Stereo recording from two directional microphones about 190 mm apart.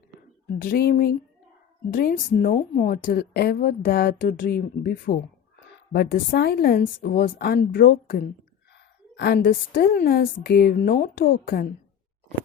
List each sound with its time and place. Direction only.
0.6 s a woman's voice: 50° left (ahead or behind)
9.1 s a woman's voice: 55° left (ahead or behind)